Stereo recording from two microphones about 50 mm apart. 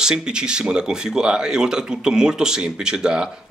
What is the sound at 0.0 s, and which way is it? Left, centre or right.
Speech, centre.